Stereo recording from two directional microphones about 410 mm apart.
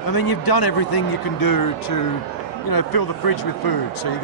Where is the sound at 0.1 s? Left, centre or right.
Left.